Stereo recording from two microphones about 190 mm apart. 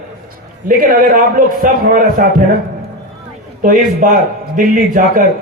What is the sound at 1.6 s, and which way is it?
Speech, 45° right (ahead or behind).